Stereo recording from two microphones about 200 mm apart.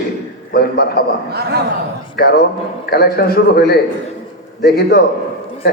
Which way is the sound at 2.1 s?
55° left (ahead or behind).